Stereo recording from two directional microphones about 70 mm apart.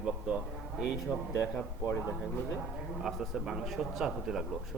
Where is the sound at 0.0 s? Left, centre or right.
Centre.